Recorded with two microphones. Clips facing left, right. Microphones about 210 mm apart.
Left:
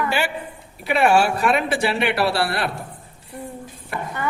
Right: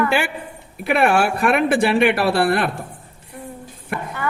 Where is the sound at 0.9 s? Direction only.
55° right (ahead or behind).